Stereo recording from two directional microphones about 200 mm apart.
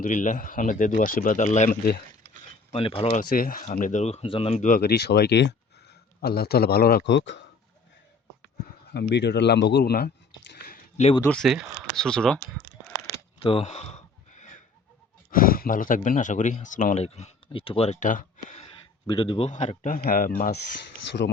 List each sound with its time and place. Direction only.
0.0 s speech: 40° left (ahead or behind)
3.2 s speech: 45° left (ahead or behind); by 7.4 s 65° left (ahead or behind)
8.9 s speech: 55° left (ahead or behind)
10.9 s speech: 30° left (ahead or behind)
11.2 s speech: 5° left (ahead or behind)
13.4 s a sound: 25° left (ahead or behind)
15.3 s speech: 45° left (ahead or behind)
19.0 s speech: 25° left (ahead or behind); by 20.3 s 45° left (ahead or behind)